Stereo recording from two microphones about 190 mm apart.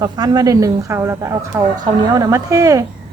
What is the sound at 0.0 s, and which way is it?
A woman's voice, 20° right (ahead or behind).